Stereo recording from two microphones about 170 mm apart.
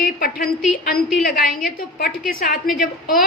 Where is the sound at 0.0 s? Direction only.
60° left (ahead or behind).